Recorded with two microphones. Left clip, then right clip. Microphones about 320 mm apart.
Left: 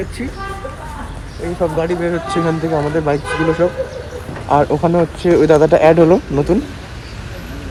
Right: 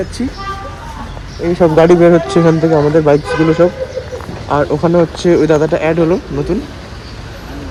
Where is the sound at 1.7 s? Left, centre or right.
Centre.